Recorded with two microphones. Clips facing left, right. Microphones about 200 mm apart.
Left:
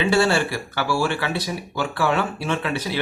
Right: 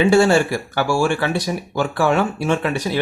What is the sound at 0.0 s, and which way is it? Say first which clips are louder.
Speech: right 5 dB; 45° right (ahead or behind).